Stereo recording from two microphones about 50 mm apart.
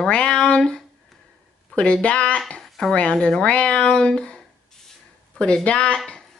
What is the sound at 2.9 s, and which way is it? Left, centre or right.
Speech, left.